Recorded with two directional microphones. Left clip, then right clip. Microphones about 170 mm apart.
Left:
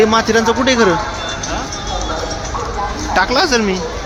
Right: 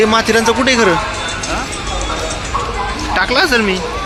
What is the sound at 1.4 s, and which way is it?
Music, 90° right.